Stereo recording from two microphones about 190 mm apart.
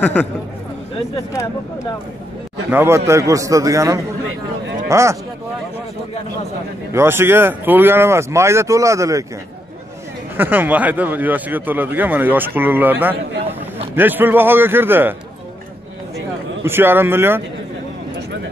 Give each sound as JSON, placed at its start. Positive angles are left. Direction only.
{"t": 0.0, "sound": "speech", "side_deg": 5}
{"t": 2.7, "sound": "speech", "side_deg": -10}
{"t": 6.9, "sound": "speech", "side_deg": -15}
{"t": 10.3, "sound": "speech", "side_deg": -10}
{"t": 13.9, "sound": "speech", "side_deg": -10}
{"t": 16.6, "sound": "speech", "side_deg": -10}